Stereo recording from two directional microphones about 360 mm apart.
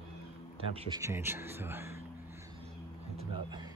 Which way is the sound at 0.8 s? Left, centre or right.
Centre.